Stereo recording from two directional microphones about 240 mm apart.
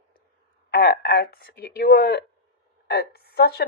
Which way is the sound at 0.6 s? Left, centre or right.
Left.